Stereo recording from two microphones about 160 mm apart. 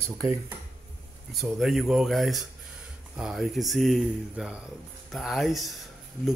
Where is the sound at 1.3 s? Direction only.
Centre (ahead or behind).